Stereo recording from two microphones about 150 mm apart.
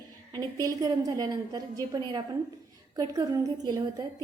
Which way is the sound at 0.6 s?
25° right (ahead or behind).